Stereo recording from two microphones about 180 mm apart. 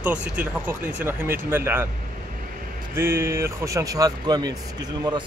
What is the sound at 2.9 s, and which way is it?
Speech, 15° right (ahead or behind).